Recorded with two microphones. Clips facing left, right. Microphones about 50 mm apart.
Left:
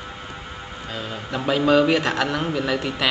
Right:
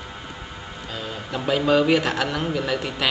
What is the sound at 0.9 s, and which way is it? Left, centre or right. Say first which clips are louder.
A man's voice: left 1 dB; centre.